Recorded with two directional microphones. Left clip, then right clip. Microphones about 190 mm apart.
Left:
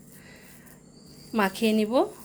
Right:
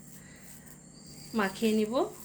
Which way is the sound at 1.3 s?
45° left (ahead or behind).